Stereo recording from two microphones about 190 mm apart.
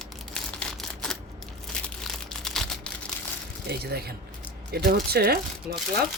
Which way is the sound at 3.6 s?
55° right (ahead or behind).